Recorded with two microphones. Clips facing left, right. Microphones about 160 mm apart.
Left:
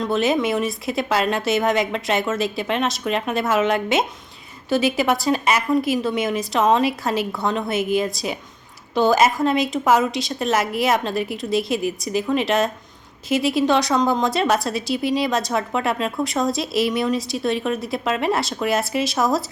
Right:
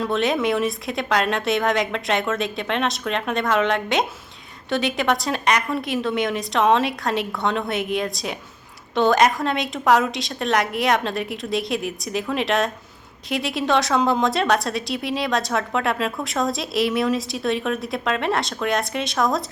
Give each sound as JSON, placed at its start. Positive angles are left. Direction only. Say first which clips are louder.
{"t": 0.0, "sound": "a woman's voice", "louder": "left 1 dB", "side_deg": 0}